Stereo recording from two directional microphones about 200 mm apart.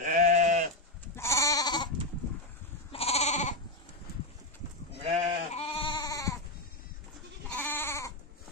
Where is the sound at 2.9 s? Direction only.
30° left (ahead or behind).